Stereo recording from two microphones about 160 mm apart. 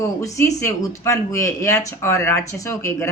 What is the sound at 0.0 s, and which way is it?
A woman's voice, 20° left (ahead or behind).